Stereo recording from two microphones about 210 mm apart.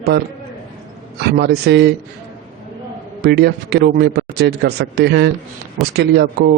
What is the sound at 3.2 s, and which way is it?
A man's voice, 50° right (ahead or behind).